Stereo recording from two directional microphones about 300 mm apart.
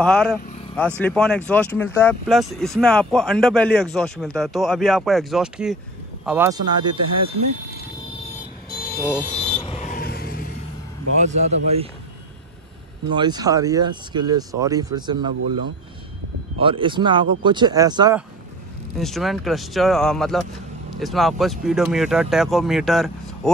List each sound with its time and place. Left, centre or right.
0.0 s speech: centre
8.6 s vehicle: left
11.1 s speech: right
13.1 s speech: centre
16.5 s speech: centre
18.9 s speech: centre